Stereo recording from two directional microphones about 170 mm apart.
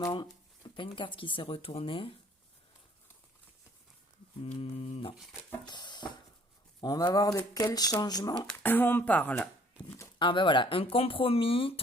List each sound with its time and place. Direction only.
0.0 s speech: 25° left (ahead or behind)
4.4 s speech: 35° left (ahead or behind)
5.1 s speech: centre (ahead or behind)
5.6 s speech: 25° left (ahead or behind)
8.5 s speech: 10° left (ahead or behind)
10.2 s speech: 30° left (ahead or behind)